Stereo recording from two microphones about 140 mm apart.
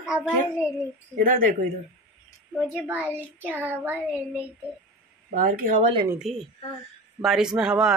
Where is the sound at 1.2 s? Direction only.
90° right.